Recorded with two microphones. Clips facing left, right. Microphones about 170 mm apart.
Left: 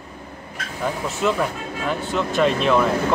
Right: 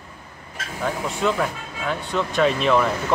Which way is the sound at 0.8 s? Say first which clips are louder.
Left 1 dB; centre (ahead or behind).